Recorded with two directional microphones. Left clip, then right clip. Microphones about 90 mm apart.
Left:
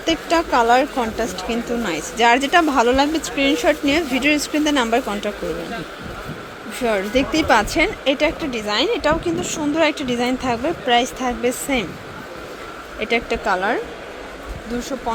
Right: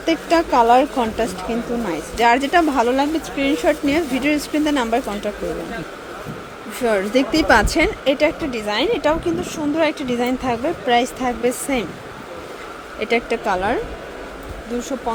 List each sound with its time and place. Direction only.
0.0 s speech: 15° right (ahead or behind)
1.5 s speech: centre (ahead or behind)
6.7 s speech: 25° right (ahead or behind)
8.0 s speech: 25° right (ahead or behind)
9.4 s speech: centre (ahead or behind); by 11.9 s 20° right (ahead or behind)
13.0 s speech: 20° right (ahead or behind)
14.8 s speech: 20° right (ahead or behind)